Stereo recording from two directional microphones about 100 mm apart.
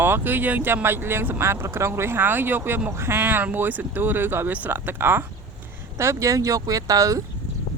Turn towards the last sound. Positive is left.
turn(degrees=-35)  # may be behind; listen again after turning